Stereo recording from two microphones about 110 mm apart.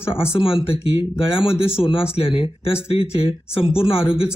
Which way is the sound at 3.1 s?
65° left (ahead or behind).